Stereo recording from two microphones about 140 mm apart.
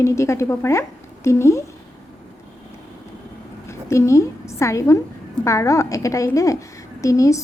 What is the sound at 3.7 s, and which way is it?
A woman's voice, 20° left (ahead or behind).